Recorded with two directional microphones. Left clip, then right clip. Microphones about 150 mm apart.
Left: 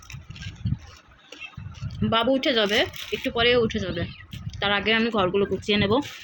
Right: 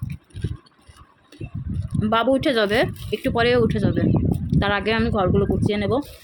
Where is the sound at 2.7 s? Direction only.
35° right (ahead or behind); by 6.0 s centre (ahead or behind).